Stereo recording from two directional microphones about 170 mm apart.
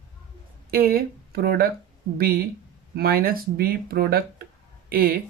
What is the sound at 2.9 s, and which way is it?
Speech, 60° right (ahead or behind).